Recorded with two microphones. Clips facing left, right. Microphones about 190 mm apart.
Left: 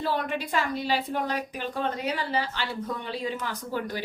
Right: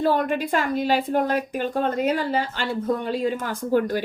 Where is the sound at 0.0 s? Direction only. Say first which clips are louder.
Right 7 dB; 50° right (ahead or behind).